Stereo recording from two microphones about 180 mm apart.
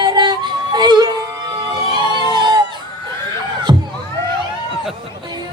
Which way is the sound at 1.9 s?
25° right (ahead or behind).